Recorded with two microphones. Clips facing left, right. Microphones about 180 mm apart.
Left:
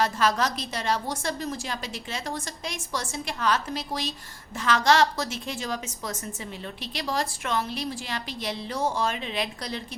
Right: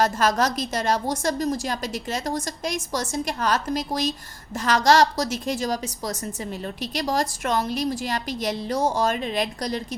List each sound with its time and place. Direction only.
0.0 s a woman's voice: 45° right (ahead or behind)